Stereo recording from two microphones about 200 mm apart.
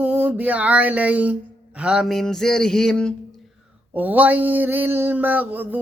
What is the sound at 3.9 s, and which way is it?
Speech, 10° right (ahead or behind).